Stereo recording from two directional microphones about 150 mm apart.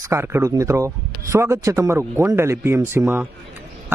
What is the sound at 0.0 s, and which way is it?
A man's voice, 20° right (ahead or behind).